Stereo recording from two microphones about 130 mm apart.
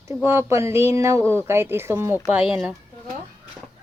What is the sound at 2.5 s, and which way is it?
Speech, 5° right (ahead or behind).